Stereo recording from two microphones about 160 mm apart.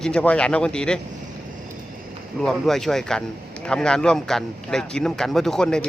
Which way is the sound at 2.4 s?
Centre (ahead or behind).